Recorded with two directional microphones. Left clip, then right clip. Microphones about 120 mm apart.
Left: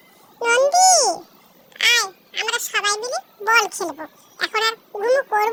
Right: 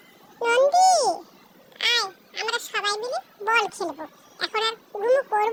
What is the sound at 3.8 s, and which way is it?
A child's voice, 15° left (ahead or behind).